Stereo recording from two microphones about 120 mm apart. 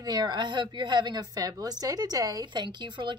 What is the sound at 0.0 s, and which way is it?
A woman's voice, 35° right (ahead or behind).